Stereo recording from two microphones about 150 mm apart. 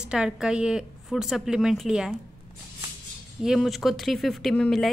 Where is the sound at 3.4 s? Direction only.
Centre (ahead or behind).